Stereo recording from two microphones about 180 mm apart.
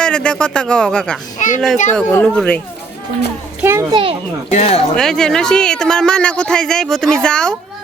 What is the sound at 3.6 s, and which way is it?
Speech, 15° right (ahead or behind).